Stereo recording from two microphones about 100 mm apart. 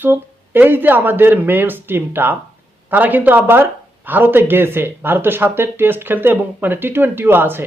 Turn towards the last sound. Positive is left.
turn(degrees=-20)  # may be behind; listen again after turning